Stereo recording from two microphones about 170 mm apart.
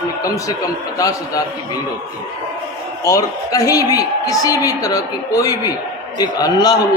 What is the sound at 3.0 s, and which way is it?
A woman's voice, 20° left (ahead or behind).